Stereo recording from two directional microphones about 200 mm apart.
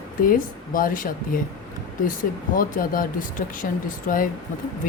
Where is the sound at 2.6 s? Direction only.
45° left (ahead or behind).